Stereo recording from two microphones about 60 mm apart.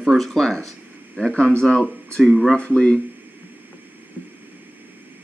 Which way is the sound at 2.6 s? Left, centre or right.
Centre.